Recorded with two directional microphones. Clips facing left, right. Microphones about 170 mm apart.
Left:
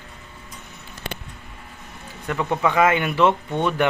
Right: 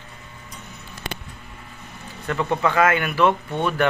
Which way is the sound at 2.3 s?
10° left (ahead or behind).